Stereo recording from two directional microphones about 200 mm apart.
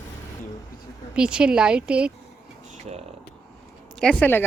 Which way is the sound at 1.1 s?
5° right (ahead or behind).